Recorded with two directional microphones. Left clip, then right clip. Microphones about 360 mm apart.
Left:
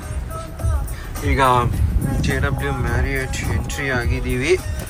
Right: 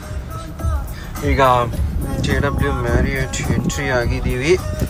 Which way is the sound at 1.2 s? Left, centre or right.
Centre.